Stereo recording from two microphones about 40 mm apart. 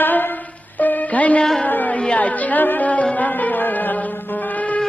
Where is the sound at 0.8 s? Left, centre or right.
Left.